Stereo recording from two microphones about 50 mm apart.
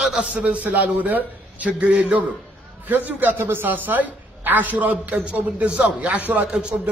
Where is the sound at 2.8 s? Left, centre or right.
Right.